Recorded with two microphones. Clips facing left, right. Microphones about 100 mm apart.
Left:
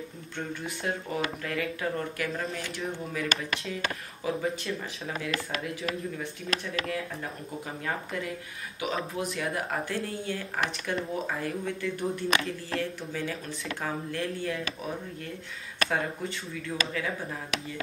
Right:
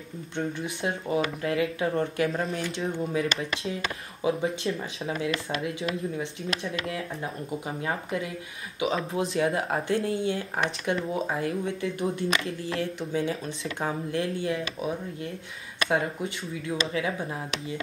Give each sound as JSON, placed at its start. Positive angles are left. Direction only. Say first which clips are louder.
{"t": 0.6, "sound": "speech", "louder": "right 2 dB", "side_deg": -20}
{"t": 15.9, "sound": "speech", "louder": "right 6 dB", "side_deg": -20}